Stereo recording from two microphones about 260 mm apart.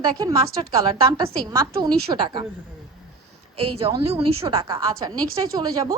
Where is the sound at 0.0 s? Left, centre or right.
Centre.